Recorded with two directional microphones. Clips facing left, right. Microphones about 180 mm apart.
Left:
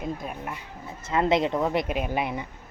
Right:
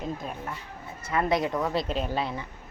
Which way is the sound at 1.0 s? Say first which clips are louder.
Left 3 dB; 25° left (ahead or behind).